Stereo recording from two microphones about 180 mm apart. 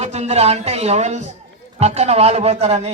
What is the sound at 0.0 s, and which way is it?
Speech, 35° right (ahead or behind).